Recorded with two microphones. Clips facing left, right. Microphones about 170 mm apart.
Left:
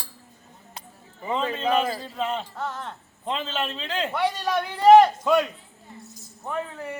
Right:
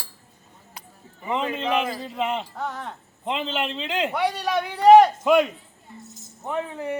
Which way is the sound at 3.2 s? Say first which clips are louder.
Right 2 dB; 15° right (ahead or behind).